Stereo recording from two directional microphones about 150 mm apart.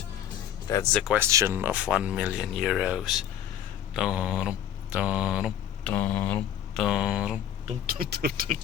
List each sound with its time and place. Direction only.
0.7 s speech: 20° left (ahead or behind)
1.2 s speech: 20° right (ahead or behind)
5.8 s mantra: 10° left (ahead or behind)
6.8 s speech: 5° right (ahead or behind)
7.9 s speech: 90° right